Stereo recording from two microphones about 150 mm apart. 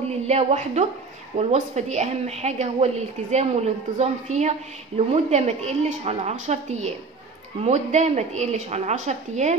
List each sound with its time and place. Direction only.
0.1 s a woman's voice: 45° right (ahead or behind)